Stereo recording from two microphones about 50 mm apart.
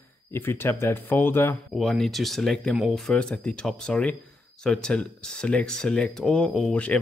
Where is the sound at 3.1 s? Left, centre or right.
Left.